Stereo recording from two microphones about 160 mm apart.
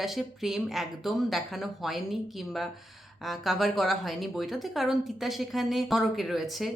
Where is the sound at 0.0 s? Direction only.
Centre (ahead or behind).